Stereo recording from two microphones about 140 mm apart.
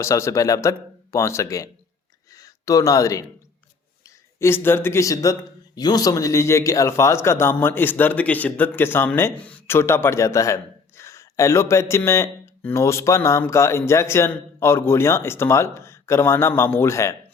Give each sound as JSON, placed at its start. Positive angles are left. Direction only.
{"t": 0.0, "sound": "speech", "side_deg": 20}
{"t": 4.4, "sound": "speech", "side_deg": 15}